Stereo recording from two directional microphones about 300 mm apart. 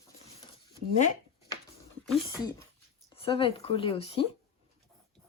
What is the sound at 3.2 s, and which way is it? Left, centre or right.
Speech, centre.